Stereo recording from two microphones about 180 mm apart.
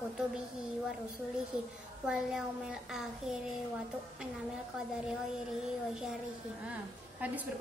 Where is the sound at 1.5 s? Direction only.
5° right (ahead or behind).